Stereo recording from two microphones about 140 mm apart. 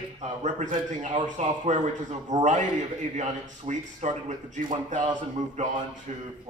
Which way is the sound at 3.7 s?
60° right (ahead or behind).